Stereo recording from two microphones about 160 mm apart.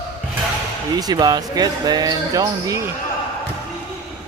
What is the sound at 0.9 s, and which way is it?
Speech, 25° right (ahead or behind).